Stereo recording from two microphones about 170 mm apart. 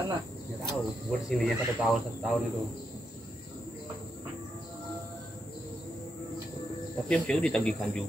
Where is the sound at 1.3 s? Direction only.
Centre (ahead or behind).